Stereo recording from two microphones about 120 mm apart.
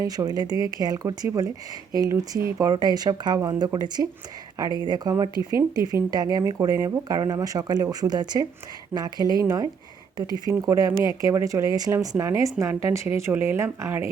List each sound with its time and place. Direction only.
0.0 s speech: 30° right (ahead or behind)